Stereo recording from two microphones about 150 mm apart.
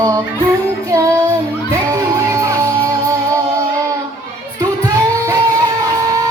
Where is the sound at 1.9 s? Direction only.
20° right (ahead or behind).